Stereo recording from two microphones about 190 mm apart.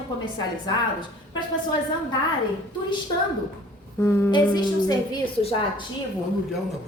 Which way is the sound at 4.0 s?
10° left (ahead or behind).